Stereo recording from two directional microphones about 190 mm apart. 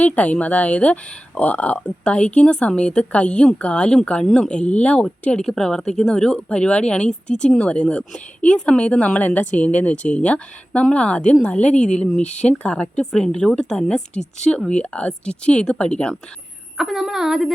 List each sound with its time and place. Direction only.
0.0 s speech: 10° left (ahead or behind)